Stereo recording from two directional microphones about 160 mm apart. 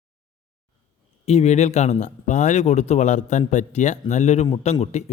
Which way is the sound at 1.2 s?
40° left (ahead or behind).